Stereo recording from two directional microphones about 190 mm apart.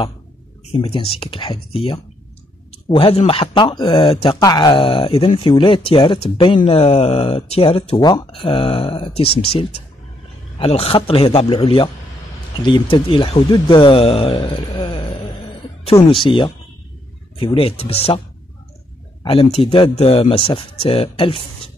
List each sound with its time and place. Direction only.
0.7 s speech: 30° left (ahead or behind)
8.0 s speech: 20° left (ahead or behind)
19.2 s speech: 30° left (ahead or behind)